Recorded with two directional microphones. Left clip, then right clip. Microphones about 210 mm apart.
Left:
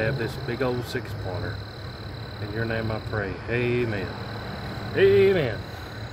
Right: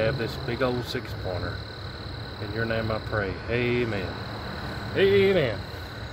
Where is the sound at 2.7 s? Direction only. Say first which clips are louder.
Right 2 dB; 20° right (ahead or behind).